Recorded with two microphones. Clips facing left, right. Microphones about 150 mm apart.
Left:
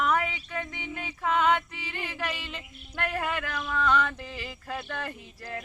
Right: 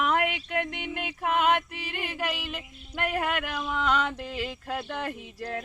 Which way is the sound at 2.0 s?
15° right (ahead or behind).